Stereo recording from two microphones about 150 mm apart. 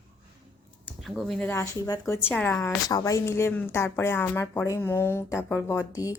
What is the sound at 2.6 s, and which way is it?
Speech, 25° left (ahead or behind).